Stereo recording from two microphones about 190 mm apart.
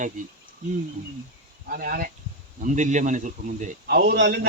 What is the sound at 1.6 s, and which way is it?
A man's voice, 50° right (ahead or behind).